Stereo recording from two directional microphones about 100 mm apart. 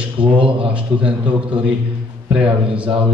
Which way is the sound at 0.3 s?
60° right (ahead or behind).